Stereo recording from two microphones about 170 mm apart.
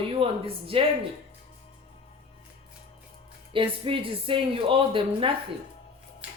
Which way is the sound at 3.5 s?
30° right (ahead or behind).